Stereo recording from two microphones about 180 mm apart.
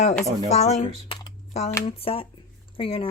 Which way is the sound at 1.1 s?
40° left (ahead or behind).